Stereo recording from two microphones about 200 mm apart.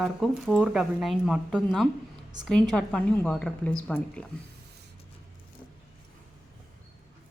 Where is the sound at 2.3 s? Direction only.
20° right (ahead or behind).